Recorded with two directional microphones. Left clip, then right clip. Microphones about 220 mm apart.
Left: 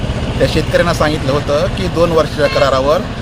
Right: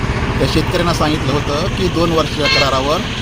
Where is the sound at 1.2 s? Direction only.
25° left (ahead or behind).